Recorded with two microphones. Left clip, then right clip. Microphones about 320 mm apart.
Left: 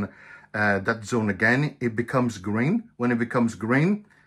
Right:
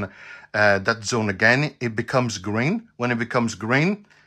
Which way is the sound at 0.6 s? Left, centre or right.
Right.